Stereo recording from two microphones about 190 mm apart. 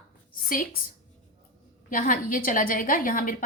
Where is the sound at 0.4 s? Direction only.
50° left (ahead or behind).